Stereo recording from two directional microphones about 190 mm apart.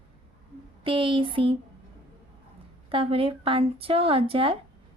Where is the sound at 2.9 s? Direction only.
30° right (ahead or behind).